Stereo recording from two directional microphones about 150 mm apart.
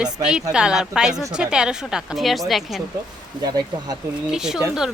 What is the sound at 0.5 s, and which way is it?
A woman's voice, 5° right (ahead or behind).